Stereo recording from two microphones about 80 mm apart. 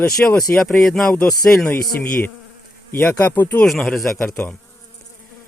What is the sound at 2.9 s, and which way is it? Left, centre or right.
Speech, left.